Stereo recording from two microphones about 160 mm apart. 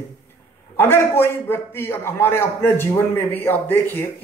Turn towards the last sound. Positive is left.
turn(degrees=10)  # may be behind; listen again after turning